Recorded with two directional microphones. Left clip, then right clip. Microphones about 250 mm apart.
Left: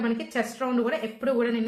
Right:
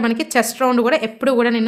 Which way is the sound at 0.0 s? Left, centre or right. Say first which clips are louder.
Right 10 dB; right.